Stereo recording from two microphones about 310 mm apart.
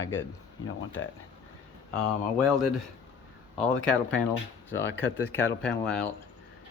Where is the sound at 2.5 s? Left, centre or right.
Centre.